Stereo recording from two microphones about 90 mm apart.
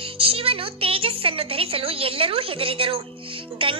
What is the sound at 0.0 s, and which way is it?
A woman's voice, 90° right.